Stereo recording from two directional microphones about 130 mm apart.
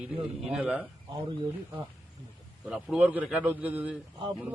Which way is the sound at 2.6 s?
5° right (ahead or behind).